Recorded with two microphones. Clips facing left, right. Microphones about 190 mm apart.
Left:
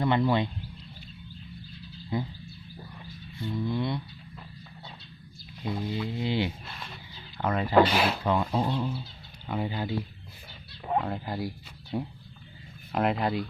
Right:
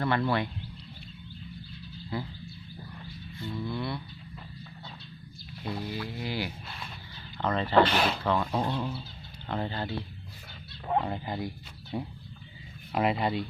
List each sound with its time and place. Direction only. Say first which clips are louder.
0.0 s speech: left 3 dB; 15° left (ahead or behind)
2.1 s music: left 4 dB; 20° left (ahead or behind)
3.4 s music: left 4 dB; 20° left (ahead or behind)
5.6 s music: left 3 dB; 20° left (ahead or behind)
7.3 s speech: left 1 dB; 10° left (ahead or behind)
10.9 s speech: even; centre (ahead or behind)